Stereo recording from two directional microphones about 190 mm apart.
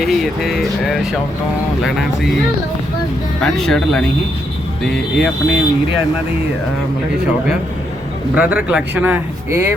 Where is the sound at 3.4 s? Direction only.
5° left (ahead or behind).